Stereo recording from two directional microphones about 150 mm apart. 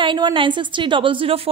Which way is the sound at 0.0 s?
35° right (ahead or behind).